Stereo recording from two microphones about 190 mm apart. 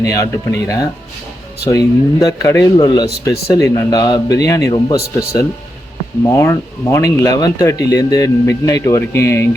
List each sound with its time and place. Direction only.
0.0 s speech: 20° left (ahead or behind)
6.2 s speech: 15° left (ahead or behind)